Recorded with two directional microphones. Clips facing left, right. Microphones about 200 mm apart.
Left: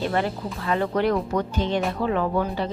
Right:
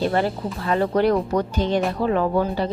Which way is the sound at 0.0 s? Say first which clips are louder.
Right 3 dB; 35° right (ahead or behind).